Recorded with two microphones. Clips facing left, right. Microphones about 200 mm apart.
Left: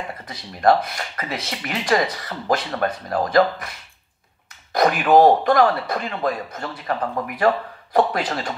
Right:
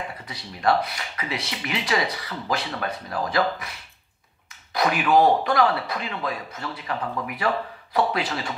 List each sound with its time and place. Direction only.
0.3 s speech: 45° left (ahead or behind)
4.7 s speech: 45° left (ahead or behind)